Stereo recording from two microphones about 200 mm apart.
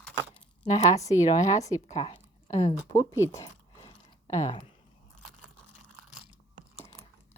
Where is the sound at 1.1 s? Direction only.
15° left (ahead or behind).